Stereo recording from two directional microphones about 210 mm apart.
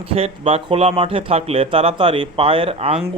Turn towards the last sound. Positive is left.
turn(degrees=-25)  # may be behind; listen again after turning